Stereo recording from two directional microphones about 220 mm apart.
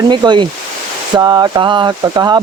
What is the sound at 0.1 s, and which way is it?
Speech, 20° right (ahead or behind).